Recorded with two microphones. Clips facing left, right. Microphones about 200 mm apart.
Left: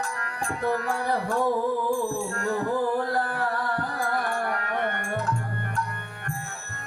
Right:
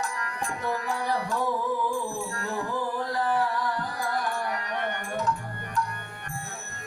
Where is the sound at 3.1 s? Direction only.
55° left (ahead or behind).